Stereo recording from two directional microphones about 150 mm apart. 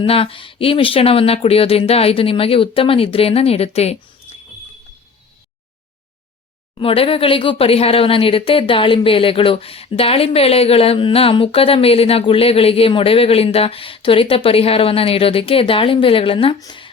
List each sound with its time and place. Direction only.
0.0 s speech: 40° left (ahead or behind)
6.7 s speech: 40° left (ahead or behind)